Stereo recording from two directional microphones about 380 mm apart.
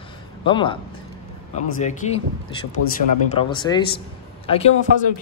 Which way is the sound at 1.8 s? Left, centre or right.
Centre.